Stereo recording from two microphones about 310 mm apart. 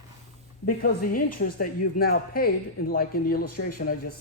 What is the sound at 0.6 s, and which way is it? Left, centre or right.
Speech, left.